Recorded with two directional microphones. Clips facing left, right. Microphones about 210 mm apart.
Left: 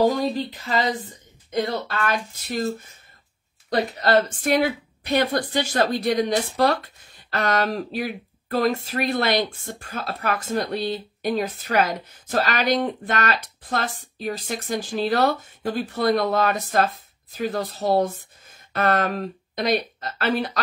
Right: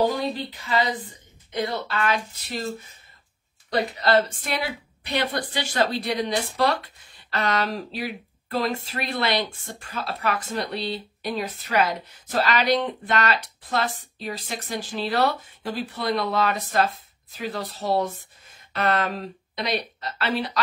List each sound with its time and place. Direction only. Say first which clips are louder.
0.0 s speech: left 3 dB; 40° left (ahead or behind)
4.0 s speech: left 1 dB; 45° left (ahead or behind)